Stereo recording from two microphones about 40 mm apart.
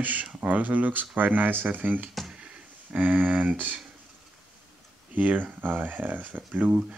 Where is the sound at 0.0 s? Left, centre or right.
Right.